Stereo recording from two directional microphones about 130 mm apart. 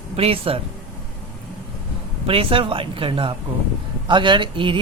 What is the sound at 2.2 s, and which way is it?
Speech, 45° right (ahead or behind).